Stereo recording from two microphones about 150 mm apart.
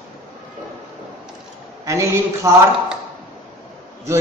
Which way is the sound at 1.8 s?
20° right (ahead or behind).